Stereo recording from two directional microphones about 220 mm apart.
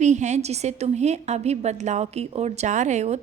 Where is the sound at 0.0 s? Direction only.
30° right (ahead or behind).